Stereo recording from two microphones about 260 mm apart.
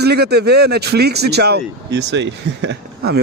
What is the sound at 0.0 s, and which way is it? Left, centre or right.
Speech, right.